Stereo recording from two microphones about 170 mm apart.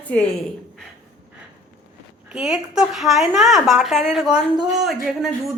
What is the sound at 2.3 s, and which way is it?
A woman's voice, 5° right (ahead or behind).